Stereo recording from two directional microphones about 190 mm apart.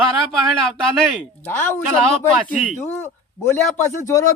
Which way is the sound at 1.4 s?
10° left (ahead or behind).